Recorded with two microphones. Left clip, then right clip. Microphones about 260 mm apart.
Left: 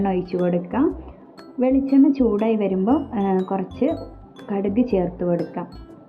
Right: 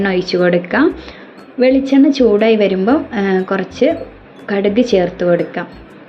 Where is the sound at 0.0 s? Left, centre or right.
Centre.